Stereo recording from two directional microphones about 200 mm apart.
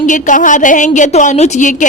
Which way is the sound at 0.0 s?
40° left (ahead or behind).